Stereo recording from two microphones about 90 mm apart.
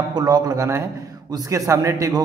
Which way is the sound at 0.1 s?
45° right (ahead or behind).